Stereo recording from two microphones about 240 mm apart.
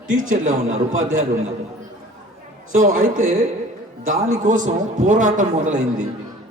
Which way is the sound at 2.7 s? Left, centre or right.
Right.